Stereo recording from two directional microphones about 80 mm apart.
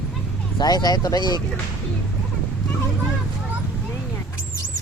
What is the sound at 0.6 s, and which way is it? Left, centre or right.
Speech, left.